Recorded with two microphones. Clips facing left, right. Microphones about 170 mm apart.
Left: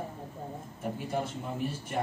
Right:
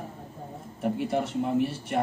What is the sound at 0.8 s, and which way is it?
Speech, 70° right (ahead or behind).